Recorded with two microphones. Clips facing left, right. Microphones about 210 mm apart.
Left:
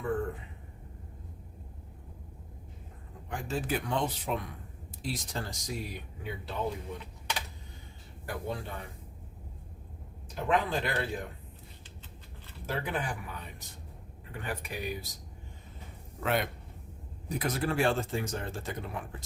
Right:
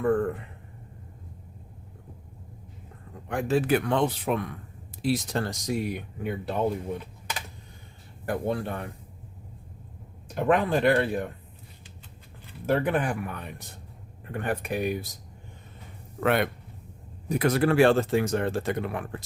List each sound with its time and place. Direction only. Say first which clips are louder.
0.0 s a sound: right 8 dB; 60° right (ahead or behind)
3.2 s speech: right 10 dB; 65° right (ahead or behind)
8.3 s speech: right 8 dB; 60° right (ahead or behind)
10.2 s speech: right 6 dB; 55° right (ahead or behind)
12.6 s speech: right 9 dB; 55° right (ahead or behind)
16.2 s speech: right 6 dB; 65° right (ahead or behind)